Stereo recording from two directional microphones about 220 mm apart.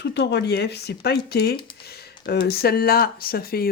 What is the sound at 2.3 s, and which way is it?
Speech, 45° left (ahead or behind).